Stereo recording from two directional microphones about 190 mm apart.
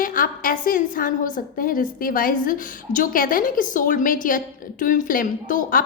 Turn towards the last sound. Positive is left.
turn(degrees=45)  # may be behind; listen again after turning